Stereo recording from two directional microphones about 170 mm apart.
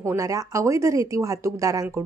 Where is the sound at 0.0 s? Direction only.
20° right (ahead or behind).